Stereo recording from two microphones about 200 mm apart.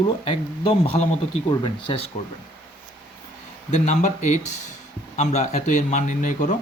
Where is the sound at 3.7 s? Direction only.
35° left (ahead or behind).